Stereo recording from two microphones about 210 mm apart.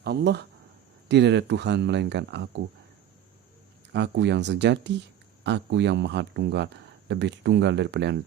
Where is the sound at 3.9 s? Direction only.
55° right (ahead or behind).